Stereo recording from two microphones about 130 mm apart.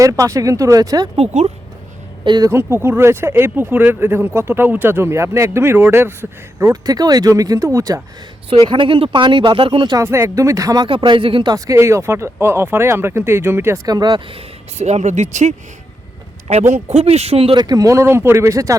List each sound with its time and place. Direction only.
0.0 s speech: 25° right (ahead or behind)
1.1 s speech: 55° right (ahead or behind)
2.2 s speech: 35° right (ahead or behind)
2.5 s speech: 20° right (ahead or behind)
8.6 s speech: 40° right (ahead or behind)
10.0 s speech: 20° right (ahead or behind)
10.8 s speech: 40° right (ahead or behind)
11.5 s speech: 25° right (ahead or behind); by 14.4 s 40° right (ahead or behind)
14.8 s speech: 60° right (ahead or behind)
17.6 s speech: 30° right (ahead or behind)